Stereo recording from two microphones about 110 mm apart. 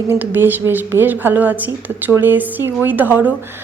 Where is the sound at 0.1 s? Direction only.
15° right (ahead or behind).